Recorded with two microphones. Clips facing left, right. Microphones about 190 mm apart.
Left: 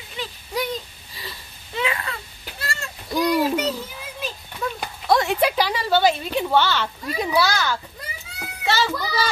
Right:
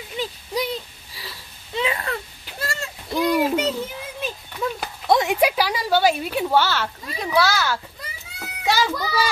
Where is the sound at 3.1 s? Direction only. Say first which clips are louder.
Even; 25° right (ahead or behind).